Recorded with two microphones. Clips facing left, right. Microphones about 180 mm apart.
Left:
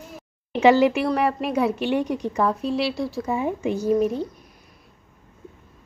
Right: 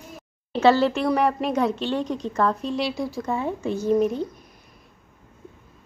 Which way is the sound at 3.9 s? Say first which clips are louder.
Right 2 dB; centre (ahead or behind).